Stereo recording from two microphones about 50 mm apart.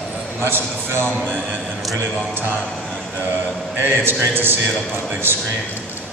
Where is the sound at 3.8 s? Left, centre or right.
Right.